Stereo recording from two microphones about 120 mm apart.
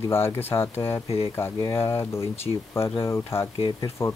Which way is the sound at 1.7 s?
20° left (ahead or behind).